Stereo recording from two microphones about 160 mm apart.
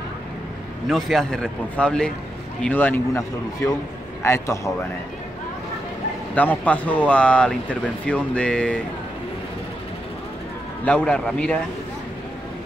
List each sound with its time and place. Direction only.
0.8 s a man's voice: centre (ahead or behind); by 4.7 s 15° left (ahead or behind)
6.3 s a man's voice: 10° left (ahead or behind)
10.9 s a man's voice: 5° left (ahead or behind)